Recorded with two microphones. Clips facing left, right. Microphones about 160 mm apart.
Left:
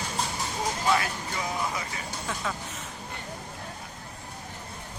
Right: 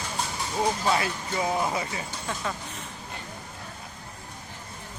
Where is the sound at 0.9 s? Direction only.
25° right (ahead or behind).